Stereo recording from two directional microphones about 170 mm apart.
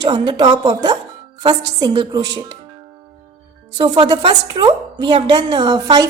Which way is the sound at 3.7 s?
25° right (ahead or behind).